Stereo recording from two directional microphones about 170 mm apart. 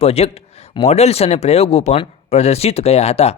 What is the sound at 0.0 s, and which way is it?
A man's voice, 35° left (ahead or behind).